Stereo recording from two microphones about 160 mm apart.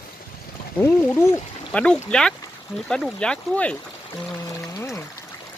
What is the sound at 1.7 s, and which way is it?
Speech, 5° left (ahead or behind).